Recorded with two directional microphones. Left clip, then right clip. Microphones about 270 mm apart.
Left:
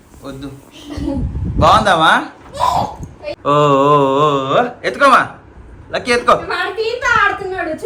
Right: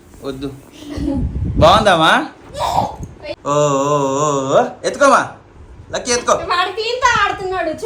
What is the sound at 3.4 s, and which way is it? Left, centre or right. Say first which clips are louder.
A woman's voice: left 4 dB; centre.